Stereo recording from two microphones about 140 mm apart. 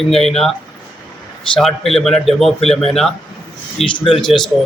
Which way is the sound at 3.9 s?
40° left (ahead or behind).